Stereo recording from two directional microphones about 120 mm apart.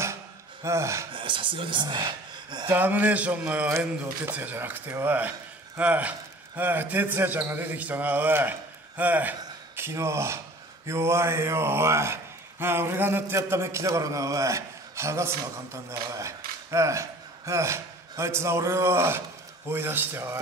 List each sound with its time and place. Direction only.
0.7 s speech: 25° right (ahead or behind)
1.1 s speech: 45° right (ahead or behind)
2.7 s a man's voice: 15° right (ahead or behind)